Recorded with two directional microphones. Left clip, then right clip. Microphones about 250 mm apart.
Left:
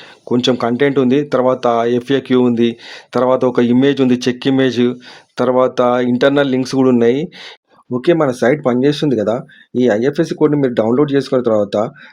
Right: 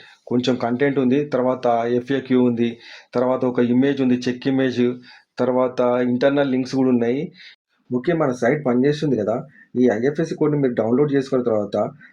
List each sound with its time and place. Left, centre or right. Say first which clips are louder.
0.3 s speech: left 6 dB; left